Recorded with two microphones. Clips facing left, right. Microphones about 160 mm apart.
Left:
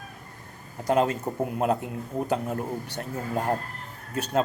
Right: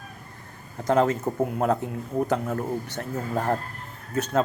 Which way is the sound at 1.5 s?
20° left (ahead or behind).